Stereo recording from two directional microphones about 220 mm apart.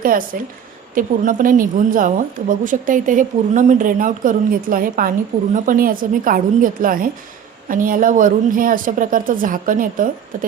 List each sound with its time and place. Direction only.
0.0 s a woman's voice: 40° right (ahead or behind)